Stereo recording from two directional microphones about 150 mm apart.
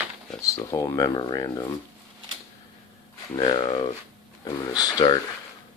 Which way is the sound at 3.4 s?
40° left (ahead or behind).